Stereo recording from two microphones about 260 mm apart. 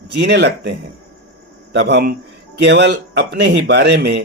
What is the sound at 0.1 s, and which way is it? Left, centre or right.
Speech, right.